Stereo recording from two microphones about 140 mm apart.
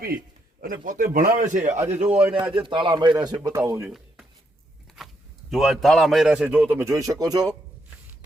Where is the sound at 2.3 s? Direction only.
40° right (ahead or behind).